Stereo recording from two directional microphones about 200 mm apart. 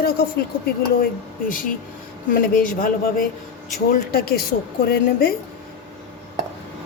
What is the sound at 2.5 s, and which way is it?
Speech, 40° left (ahead or behind).